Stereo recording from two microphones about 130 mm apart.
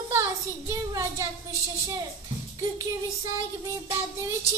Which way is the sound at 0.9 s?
25° right (ahead or behind).